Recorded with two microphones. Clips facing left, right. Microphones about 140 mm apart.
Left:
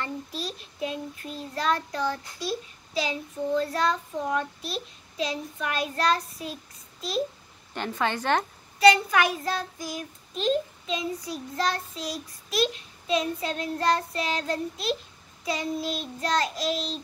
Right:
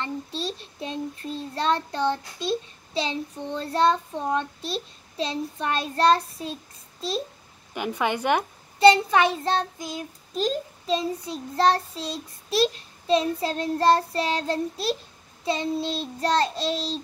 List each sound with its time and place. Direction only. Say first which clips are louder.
0.0 s child singing: right 3 dB; 30° right (ahead or behind)
7.7 s a woman's voice: right 2 dB; 10° right (ahead or behind)
8.7 s child singing: right 3 dB; 25° right (ahead or behind)
10.3 s child singing: left 1 dB; 35° right (ahead or behind)